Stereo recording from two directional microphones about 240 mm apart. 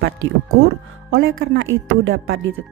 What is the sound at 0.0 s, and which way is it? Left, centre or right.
Speech, right.